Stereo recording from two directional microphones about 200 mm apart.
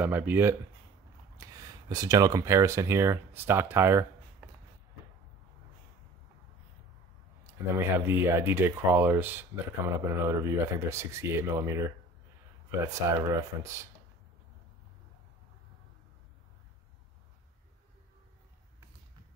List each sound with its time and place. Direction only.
0.0 s speech: 10° right (ahead or behind)
7.7 s speech: 10° right (ahead or behind)
13.3 s speech: 15° right (ahead or behind)